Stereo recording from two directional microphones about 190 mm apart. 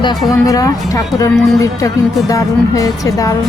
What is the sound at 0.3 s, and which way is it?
Speech, 20° left (ahead or behind).